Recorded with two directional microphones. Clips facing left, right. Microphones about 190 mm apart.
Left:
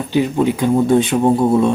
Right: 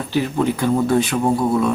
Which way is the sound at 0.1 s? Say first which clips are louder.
Left 4 dB; 15° left (ahead or behind).